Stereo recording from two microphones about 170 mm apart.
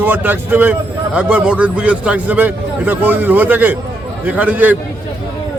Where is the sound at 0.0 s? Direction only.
10° right (ahead or behind).